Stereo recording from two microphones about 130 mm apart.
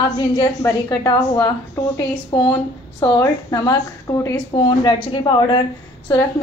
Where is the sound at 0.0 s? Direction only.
30° left (ahead or behind).